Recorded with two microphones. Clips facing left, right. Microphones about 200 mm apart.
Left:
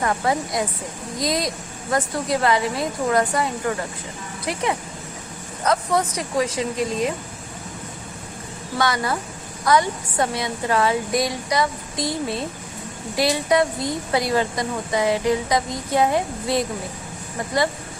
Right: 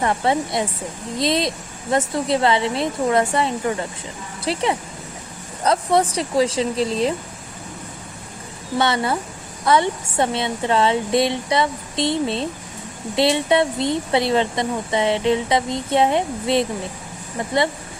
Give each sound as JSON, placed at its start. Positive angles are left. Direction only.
{"t": 0.0, "sound": "speech", "side_deg": -25}
{"t": 5.6, "sound": "speech", "side_deg": -30}
{"t": 8.8, "sound": "speech", "side_deg": -25}